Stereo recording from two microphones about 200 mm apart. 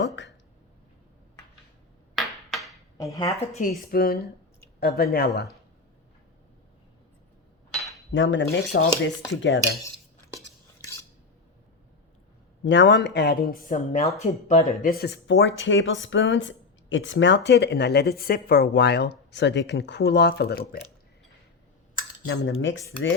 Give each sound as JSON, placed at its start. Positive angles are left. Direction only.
{"t": 2.1, "sound": "a sound", "side_deg": 0}
{"t": 3.0, "sound": "a woman's voice", "side_deg": 15}
{"t": 3.5, "sound": "speech", "side_deg": 35}
{"t": 3.9, "sound": "speech", "side_deg": 50}
{"t": 8.1, "sound": "cutlery", "side_deg": 70}
{"t": 8.7, "sound": "speech", "side_deg": 55}
{"t": 9.4, "sound": "cutlery", "side_deg": 65}
{"t": 12.6, "sound": "speech", "side_deg": 60}
{"t": 21.9, "sound": "cutlery", "side_deg": 80}